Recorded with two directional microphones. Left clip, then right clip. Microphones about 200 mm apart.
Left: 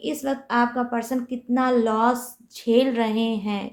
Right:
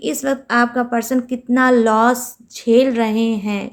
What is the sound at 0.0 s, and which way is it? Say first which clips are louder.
A woman's voice: right 6 dB; 40° right (ahead or behind).